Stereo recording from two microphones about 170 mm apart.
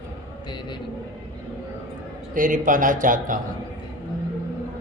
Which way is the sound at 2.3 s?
50° right (ahead or behind).